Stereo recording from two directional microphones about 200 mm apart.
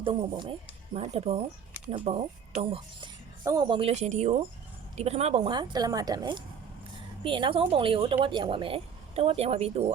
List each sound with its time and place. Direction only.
0.0 s speech: 25° right (ahead or behind)